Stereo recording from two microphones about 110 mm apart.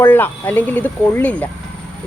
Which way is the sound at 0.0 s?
15° left (ahead or behind).